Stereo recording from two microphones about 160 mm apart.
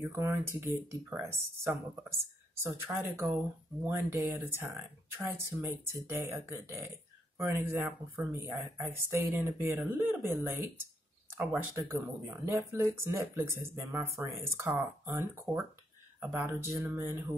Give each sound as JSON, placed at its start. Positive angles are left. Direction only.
{"t": 0.1, "sound": "speech", "side_deg": -15}
{"t": 11.7, "sound": "speech", "side_deg": -15}